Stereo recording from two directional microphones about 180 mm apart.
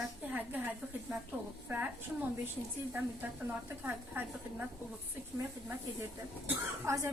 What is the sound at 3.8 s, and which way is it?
Speech, 10° right (ahead or behind).